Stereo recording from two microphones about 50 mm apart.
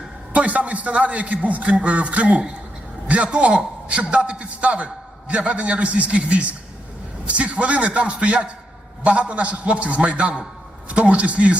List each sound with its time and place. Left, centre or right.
0.3 s a man's voice: right